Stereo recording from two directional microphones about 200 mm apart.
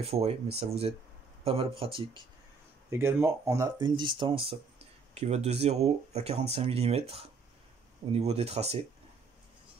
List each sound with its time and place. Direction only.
0.0 s speech: 30° right (ahead or behind)
2.9 s speech: 10° right (ahead or behind); by 8.7 s 30° right (ahead or behind)